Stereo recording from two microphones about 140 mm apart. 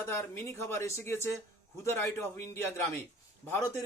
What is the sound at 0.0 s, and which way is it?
A man's voice, 20° left (ahead or behind).